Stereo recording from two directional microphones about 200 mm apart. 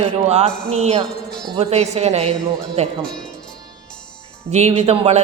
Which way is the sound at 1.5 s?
30° right (ahead or behind).